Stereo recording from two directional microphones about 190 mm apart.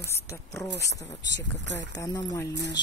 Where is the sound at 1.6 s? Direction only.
70° right (ahead or behind).